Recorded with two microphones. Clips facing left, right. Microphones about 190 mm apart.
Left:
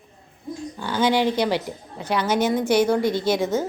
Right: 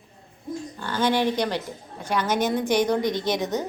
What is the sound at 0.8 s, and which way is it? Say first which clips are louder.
A woman's voice: left 3 dB; 10° left (ahead or behind).